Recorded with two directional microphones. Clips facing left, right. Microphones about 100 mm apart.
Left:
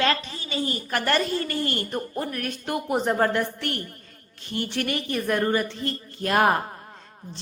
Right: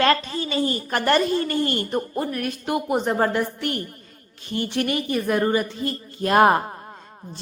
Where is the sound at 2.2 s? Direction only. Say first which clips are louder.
Right 4 dB; 5° right (ahead or behind).